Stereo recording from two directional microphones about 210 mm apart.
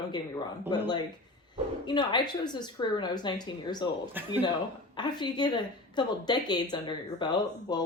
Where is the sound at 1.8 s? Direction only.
20° left (ahead or behind).